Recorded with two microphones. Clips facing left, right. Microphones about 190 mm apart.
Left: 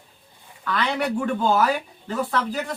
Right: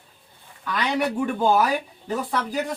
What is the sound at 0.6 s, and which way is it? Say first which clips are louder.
Speech: even; 15° right (ahead or behind).